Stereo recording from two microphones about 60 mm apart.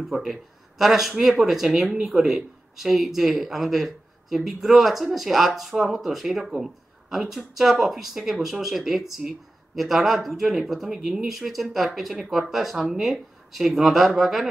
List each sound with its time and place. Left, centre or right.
0.0 s speech: centre